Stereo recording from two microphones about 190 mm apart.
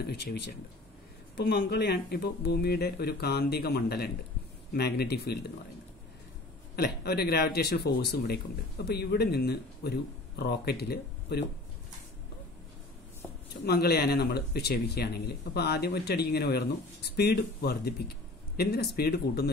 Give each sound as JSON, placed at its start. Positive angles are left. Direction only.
{"t": 0.0, "sound": "speech", "side_deg": 60}
{"t": 6.7, "sound": "speech", "side_deg": 55}
{"t": 13.7, "sound": "speech", "side_deg": 55}